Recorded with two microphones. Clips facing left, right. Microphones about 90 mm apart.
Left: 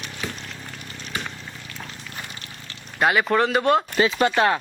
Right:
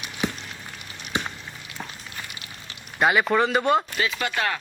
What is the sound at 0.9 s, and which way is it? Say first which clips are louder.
Frying: right 3 dB; 15° right (ahead or behind).